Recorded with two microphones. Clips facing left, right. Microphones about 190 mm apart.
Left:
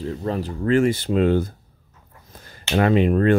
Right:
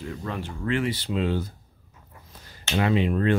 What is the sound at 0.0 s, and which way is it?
Speech, 35° left (ahead or behind).